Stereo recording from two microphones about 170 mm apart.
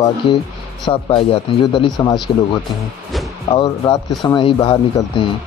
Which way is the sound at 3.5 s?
30° left (ahead or behind).